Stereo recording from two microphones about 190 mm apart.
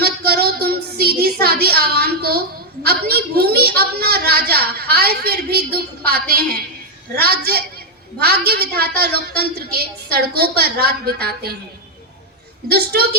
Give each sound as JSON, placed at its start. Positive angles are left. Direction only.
{"t": 0.0, "sound": "child singing", "side_deg": -55}
{"t": 2.8, "sound": "a woman's voice", "side_deg": -55}
{"t": 12.6, "sound": "a woman's voice", "side_deg": -55}